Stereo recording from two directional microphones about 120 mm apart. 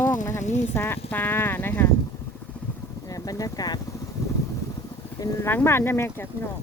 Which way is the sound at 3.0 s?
30° left (ahead or behind).